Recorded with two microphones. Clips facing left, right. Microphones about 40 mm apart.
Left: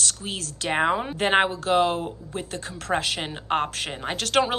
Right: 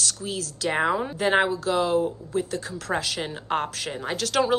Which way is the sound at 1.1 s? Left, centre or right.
Left.